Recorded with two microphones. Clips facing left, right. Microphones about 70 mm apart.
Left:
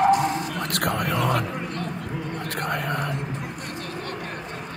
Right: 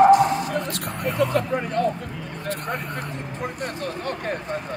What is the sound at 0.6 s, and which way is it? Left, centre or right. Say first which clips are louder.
Vehicle: left 2 dB; left.